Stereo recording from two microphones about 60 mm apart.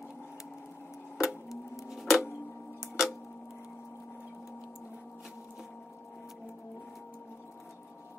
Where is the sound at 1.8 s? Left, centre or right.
Centre.